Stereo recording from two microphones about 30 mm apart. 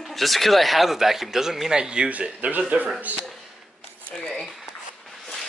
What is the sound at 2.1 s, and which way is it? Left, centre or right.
Speech, right.